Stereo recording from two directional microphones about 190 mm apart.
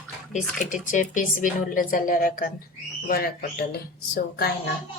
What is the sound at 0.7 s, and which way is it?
A woman's voice, 40° left (ahead or behind).